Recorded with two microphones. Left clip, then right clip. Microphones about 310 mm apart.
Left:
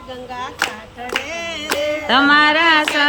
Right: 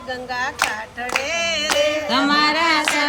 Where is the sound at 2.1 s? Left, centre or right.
Centre.